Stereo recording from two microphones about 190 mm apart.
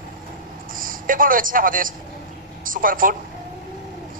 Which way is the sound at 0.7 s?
45° right (ahead or behind).